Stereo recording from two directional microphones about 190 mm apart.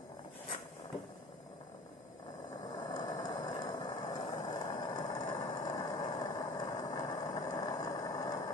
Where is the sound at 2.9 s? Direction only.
20° left (ahead or behind).